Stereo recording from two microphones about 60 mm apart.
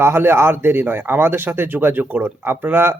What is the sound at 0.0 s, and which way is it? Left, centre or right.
Speech, right.